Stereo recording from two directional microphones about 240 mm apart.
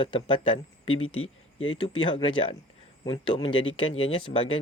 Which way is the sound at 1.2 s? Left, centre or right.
Left.